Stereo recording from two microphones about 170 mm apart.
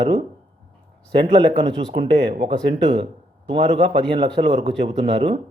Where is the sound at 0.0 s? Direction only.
30° right (ahead or behind).